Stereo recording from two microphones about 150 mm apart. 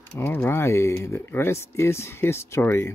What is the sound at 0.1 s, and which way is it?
Speech, 15° left (ahead or behind).